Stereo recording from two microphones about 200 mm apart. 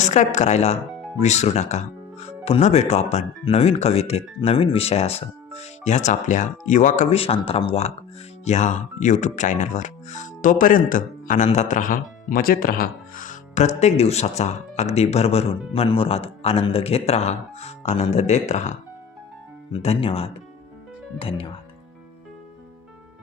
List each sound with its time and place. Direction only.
0.0 s speech: 35° left (ahead or behind)
19.7 s speech: 30° left (ahead or behind)